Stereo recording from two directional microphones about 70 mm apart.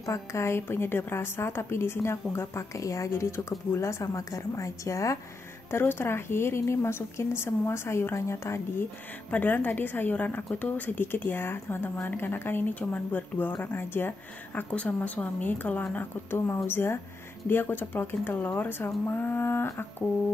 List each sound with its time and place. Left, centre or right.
0.0 s a woman's voice: left
5.7 s a woman's voice: left
9.3 s a woman's voice: left